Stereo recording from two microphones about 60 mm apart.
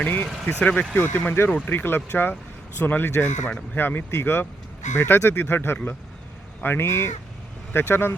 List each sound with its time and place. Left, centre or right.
0.0 s speech: left
6.8 s speech: left